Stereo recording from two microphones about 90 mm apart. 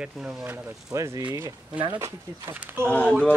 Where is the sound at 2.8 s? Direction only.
15° left (ahead or behind).